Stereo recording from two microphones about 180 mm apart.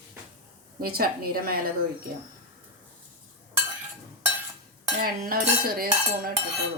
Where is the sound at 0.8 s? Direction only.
55° right (ahead or behind).